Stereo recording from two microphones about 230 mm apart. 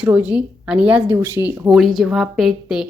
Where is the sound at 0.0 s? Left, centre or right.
Centre.